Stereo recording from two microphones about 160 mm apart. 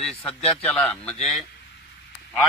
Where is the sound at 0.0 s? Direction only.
5° left (ahead or behind).